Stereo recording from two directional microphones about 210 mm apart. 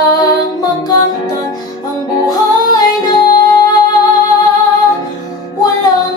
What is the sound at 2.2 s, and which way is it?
Music, 20° left (ahead or behind).